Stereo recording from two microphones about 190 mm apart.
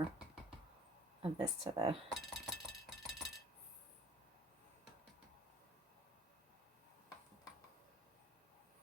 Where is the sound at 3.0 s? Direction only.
Centre (ahead or behind).